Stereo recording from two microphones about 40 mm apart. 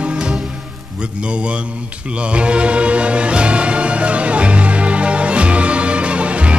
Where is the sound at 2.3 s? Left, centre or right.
Right.